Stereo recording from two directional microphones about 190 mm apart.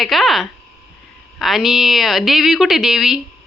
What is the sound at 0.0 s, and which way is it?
A woman's voice, centre (ahead or behind).